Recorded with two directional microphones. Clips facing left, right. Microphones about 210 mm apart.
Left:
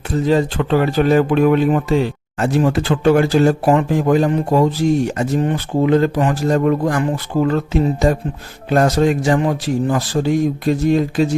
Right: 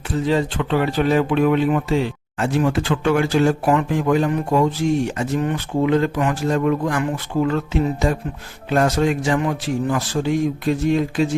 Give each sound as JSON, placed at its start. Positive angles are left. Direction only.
{"t": 0.3, "sound": "speech", "side_deg": 40}